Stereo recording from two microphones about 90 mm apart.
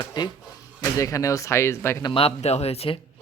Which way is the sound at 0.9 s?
35° left (ahead or behind).